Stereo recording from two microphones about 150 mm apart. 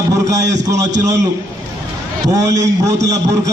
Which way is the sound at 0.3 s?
20° right (ahead or behind).